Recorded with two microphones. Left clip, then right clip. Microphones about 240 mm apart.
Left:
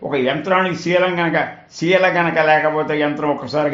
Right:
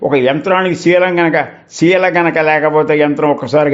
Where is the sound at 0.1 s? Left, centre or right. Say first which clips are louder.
Right 3 dB; right.